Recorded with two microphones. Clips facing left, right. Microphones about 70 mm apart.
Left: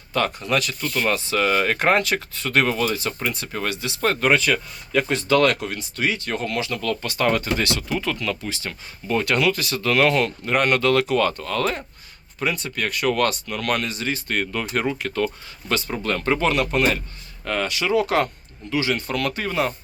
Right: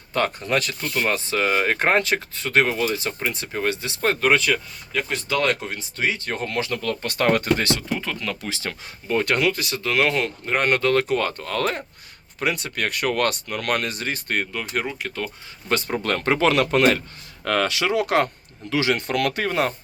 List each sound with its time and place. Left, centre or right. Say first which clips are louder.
0.1 s speech: even; right
4.2 s speech: even; centre
5.5 s speech: left 1 dB; right
7.1 s speech: right 2 dB; right
7.6 s speech: left 1 dB; right
8.7 s speech: right 3 dB; right
9.0 s speech: even; right
9.6 s speech: left 2 dB; centre; by 11.8 s right
12.4 s speech: even; right
14.8 s speech: left 3 dB; centre
15.7 s speech: right 1 dB; right
17.9 s speech: left 2 dB; right
18.7 s speech: right 1 dB; right